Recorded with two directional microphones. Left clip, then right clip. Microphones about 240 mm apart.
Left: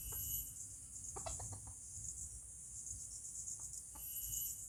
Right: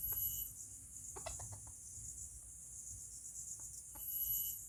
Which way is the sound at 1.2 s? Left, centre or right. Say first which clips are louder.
Left 1 dB; right.